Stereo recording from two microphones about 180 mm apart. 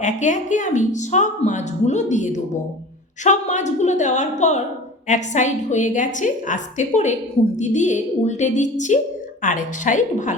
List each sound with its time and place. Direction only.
0.0 s a woman's voice: 45° left (ahead or behind)